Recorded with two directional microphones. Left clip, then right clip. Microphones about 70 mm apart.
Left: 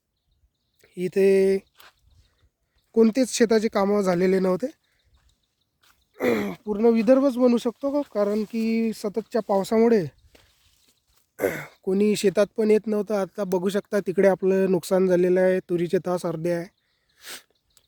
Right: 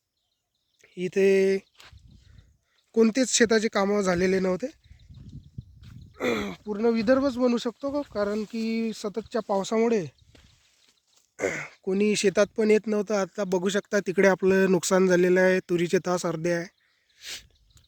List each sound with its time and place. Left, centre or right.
0.9 s a sound: left
1.1 s speech: left
1.5 s a sound: left
2.9 s speech: left
4.3 s speech: left
5.8 s wild animals: left
6.7 s speech: left
7.8 s speech: left
11.3 s a sound: left
11.9 s speech: left
12.5 s speech: centre
14.2 s speech: centre